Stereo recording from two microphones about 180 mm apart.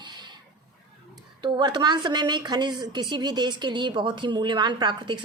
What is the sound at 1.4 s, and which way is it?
A woman's voice, 25° right (ahead or behind).